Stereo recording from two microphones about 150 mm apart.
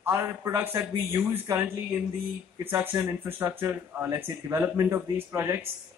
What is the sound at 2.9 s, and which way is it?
Speech, 15° right (ahead or behind).